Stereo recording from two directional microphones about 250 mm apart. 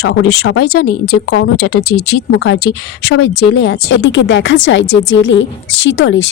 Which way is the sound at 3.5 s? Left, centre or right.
Left.